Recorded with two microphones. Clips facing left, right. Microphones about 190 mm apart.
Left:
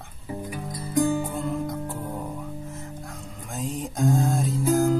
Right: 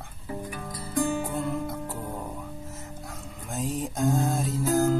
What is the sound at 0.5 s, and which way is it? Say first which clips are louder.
Music: left 5 dB; 20° left (ahead or behind).